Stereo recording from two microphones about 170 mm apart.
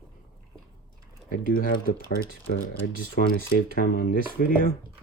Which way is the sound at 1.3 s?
55° left (ahead or behind).